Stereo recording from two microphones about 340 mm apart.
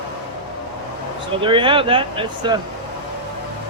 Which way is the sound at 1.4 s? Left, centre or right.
Centre.